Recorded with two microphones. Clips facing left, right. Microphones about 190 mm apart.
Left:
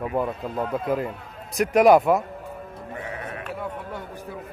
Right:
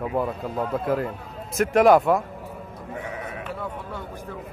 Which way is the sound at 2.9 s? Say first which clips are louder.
Right 1 dB; centre (ahead or behind).